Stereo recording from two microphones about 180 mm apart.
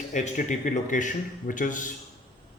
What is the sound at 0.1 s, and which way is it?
Speech, 45° left (ahead or behind).